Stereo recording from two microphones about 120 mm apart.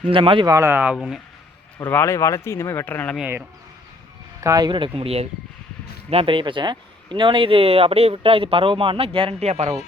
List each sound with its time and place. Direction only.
0.1 s speech: 45° right (ahead or behind)
0.4 s speech: 25° right (ahead or behind)
1.8 s speech: 20° left (ahead or behind)
4.4 s speech: 30° right (ahead or behind)
4.9 s speech: 55° right (ahead or behind)
9.5 s speech: 65° right (ahead or behind)